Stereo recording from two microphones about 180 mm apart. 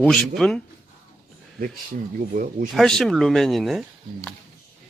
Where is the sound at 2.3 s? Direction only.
50° right (ahead or behind).